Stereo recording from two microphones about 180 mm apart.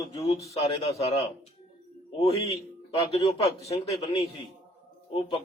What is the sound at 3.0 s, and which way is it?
A man's voice, 35° left (ahead or behind).